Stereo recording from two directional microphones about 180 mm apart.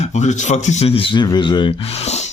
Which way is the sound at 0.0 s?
40° left (ahead or behind).